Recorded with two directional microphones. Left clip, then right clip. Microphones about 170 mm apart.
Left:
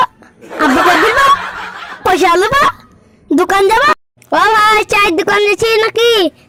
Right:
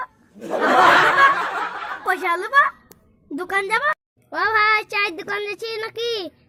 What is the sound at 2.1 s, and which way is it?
A woman's voice, 45° left (ahead or behind).